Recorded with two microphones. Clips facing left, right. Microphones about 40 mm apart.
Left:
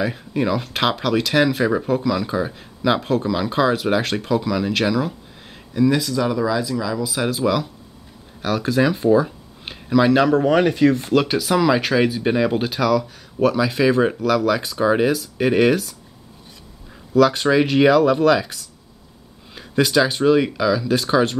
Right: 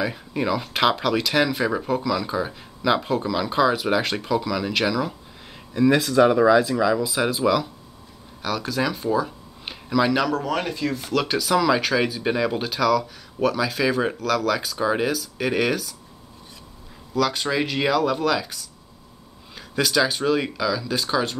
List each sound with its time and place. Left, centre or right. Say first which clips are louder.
0.0 s speech: left 3 dB; centre
3.0 s speech: left 3 dB; centre
3.3 s speech: even; centre
5.9 s speech: right 4 dB; right
7.1 s speech: even; centre
8.4 s speech: left 6 dB; centre
10.4 s speech: left 10 dB; left
11.1 s speech: left 3 dB; centre
17.1 s speech: left 7 dB; left
19.5 s a sound: left 4 dB; centre
20.1 s speech: left 6 dB; centre